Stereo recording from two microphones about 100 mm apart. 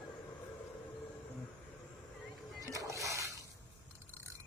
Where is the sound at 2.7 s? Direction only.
35° right (ahead or behind).